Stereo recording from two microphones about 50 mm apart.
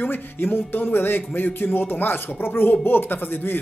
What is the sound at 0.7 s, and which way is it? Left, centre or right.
Speech, left.